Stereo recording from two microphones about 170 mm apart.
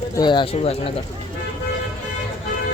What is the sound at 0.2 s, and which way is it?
Speech, 25° left (ahead or behind).